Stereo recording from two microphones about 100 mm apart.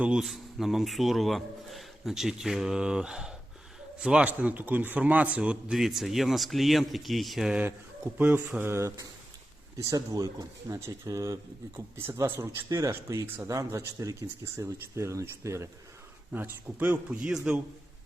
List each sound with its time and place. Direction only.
0.0 s a man's voice: 5° right (ahead or behind)
8.1 s speech: 30° right (ahead or behind)
16.3 s a man's voice: 15° right (ahead or behind)